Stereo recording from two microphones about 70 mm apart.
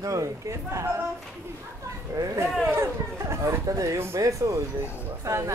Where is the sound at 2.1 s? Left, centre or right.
Right.